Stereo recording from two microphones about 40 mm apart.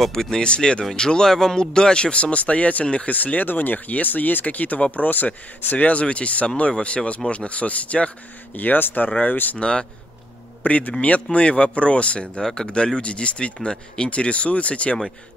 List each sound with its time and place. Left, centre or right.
0.0 s speech: centre
0.5 s speech: left
3.1 s speech: left
8.5 s speech: left
9.6 s speech: left
10.6 s speech: left